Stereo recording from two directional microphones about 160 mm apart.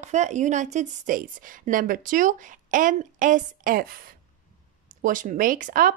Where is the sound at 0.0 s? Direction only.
50° right (ahead or behind).